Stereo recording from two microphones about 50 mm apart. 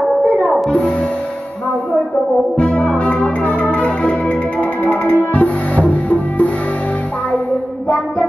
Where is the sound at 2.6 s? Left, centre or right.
Left.